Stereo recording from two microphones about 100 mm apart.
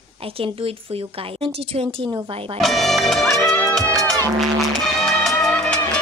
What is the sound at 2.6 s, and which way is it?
Music, centre (ahead or behind).